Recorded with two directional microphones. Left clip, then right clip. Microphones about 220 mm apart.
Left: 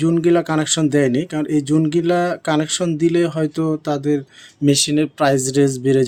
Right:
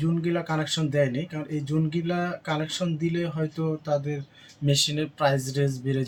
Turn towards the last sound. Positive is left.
turn(degrees=50)  # may be behind; listen again after turning